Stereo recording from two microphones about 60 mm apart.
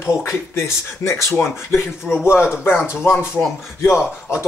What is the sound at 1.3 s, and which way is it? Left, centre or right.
Speech, left.